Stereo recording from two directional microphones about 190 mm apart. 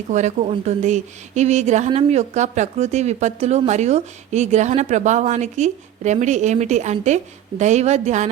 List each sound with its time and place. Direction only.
0.1 s a woman's voice: 40° right (ahead or behind)